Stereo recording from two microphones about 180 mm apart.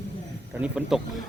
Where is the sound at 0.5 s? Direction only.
5° right (ahead or behind).